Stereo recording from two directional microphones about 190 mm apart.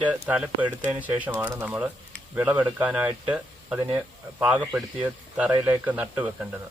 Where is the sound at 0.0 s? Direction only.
10° right (ahead or behind).